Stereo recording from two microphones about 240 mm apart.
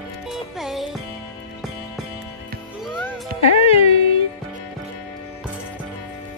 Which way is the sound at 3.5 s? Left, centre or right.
Left.